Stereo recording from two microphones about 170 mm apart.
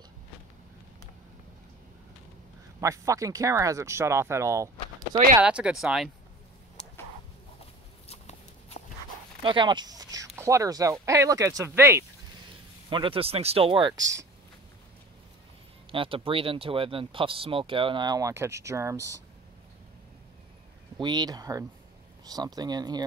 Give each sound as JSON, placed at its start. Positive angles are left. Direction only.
{"t": 2.8, "sound": "speech", "side_deg": -20}
{"t": 5.4, "sound": "speech", "side_deg": -5}
{"t": 8.1, "sound": "a sound", "side_deg": 35}
{"t": 9.4, "sound": "a sound", "side_deg": -30}
{"t": 10.3, "sound": "speech", "side_deg": -15}
{"t": 12.9, "sound": "speech", "side_deg": -30}
{"t": 15.9, "sound": "speech", "side_deg": -30}
{"t": 21.0, "sound": "speech", "side_deg": -25}